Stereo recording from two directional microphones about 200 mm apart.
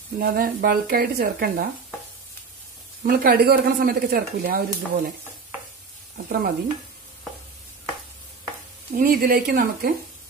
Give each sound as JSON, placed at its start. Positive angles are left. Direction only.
{"t": 0.2, "sound": "speech", "side_deg": -45}
{"t": 3.0, "sound": "speech", "side_deg": -50}
{"t": 6.2, "sound": "speech", "side_deg": -50}
{"t": 8.9, "sound": "speech", "side_deg": -45}